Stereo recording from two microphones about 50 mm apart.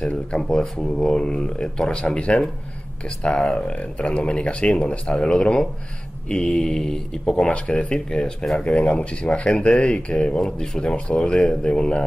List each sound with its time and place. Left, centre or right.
0.0 s speech: centre
7.4 s speech: left
10.4 s speech: centre